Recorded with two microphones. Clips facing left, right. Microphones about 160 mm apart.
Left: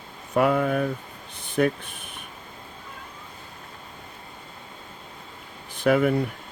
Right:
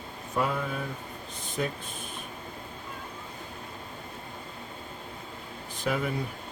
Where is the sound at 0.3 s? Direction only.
65° left (ahead or behind).